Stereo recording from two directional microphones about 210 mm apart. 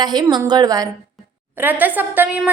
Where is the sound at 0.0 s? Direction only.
20° right (ahead or behind).